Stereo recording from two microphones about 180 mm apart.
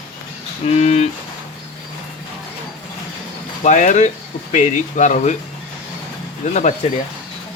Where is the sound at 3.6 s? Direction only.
40° left (ahead or behind).